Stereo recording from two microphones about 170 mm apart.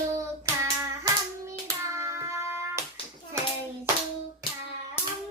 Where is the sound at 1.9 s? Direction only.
15° right (ahead or behind).